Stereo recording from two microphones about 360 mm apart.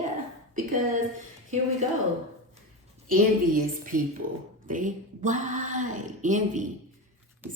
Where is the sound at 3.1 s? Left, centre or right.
Right.